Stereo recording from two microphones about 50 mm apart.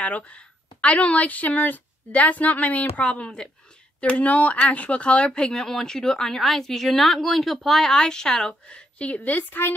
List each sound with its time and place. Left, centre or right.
0.0 s a woman's voice: left